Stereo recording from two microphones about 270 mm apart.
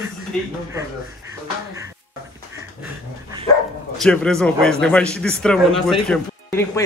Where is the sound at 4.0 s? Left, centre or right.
Centre.